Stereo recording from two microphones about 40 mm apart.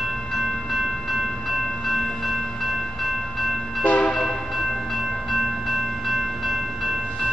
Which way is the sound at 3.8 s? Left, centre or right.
Left.